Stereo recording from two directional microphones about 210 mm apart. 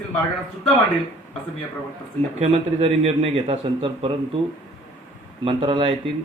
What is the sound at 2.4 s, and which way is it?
Speech, 30° right (ahead or behind).